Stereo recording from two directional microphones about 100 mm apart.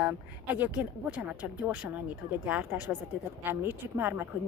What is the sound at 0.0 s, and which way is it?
Speech, 15° right (ahead or behind).